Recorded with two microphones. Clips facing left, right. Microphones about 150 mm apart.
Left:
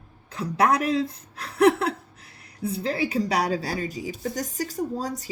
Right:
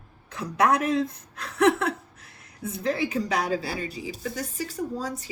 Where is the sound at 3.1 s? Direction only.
40° left (ahead or behind).